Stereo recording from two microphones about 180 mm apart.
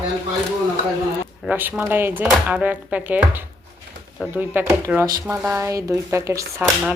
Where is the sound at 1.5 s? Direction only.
10° right (ahead or behind).